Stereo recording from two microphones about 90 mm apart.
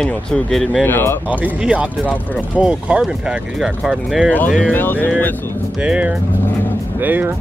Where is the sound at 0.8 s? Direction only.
25° left (ahead or behind).